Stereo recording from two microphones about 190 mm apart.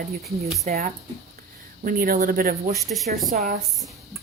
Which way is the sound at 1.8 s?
45° right (ahead or behind).